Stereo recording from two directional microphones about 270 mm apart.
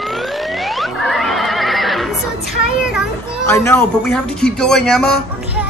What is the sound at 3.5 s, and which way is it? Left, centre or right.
Speech, centre.